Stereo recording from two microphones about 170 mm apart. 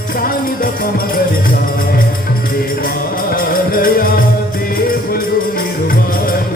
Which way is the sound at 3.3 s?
60° left (ahead or behind).